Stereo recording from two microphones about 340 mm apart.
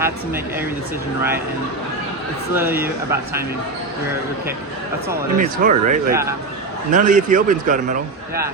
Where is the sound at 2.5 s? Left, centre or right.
Centre.